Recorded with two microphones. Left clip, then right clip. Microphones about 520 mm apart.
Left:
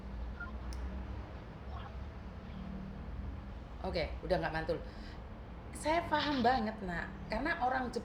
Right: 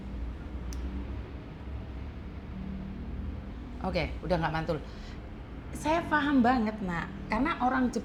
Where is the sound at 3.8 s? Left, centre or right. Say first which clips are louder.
Right 5 dB; centre.